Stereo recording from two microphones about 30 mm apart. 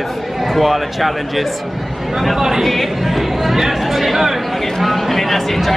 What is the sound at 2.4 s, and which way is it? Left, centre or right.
Speech, centre.